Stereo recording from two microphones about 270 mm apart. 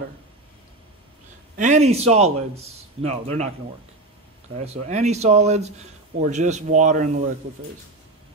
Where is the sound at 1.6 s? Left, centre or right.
Right.